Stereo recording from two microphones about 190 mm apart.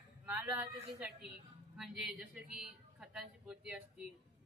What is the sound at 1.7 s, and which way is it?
Speech, 5° right (ahead or behind).